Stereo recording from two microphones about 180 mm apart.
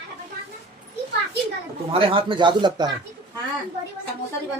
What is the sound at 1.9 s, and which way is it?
Speech, 30° right (ahead or behind).